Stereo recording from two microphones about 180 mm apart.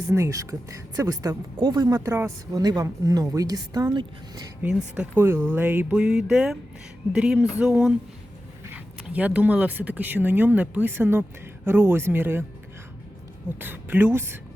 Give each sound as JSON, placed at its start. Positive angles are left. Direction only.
{"t": 0.1, "sound": "speech", "side_deg": -15}
{"t": 13.6, "sound": "speech", "side_deg": -10}